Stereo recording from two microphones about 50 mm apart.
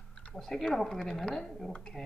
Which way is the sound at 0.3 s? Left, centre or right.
Centre.